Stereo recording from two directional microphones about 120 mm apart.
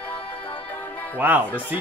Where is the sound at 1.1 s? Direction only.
15° right (ahead or behind).